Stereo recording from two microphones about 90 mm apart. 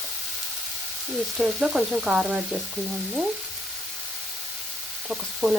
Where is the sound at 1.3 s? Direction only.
5° right (ahead or behind).